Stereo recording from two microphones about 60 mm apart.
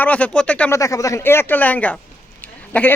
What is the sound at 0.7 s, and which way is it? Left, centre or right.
Speech, left.